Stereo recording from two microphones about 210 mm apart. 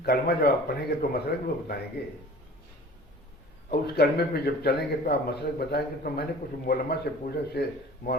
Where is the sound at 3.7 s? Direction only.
50° left (ahead or behind).